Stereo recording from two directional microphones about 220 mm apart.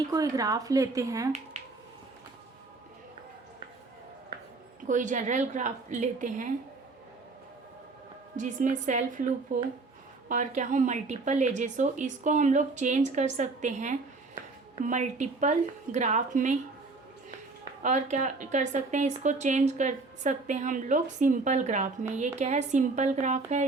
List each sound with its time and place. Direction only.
0.1 s speech: 15° right (ahead or behind)
4.9 s speech: 35° right (ahead or behind)
8.4 s speech: 35° right (ahead or behind)
17.8 s speech: 35° right (ahead or behind)